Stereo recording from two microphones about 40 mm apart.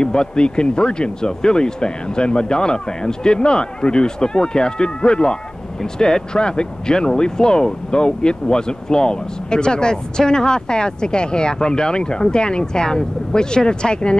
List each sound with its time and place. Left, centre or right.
0.0 s speech: left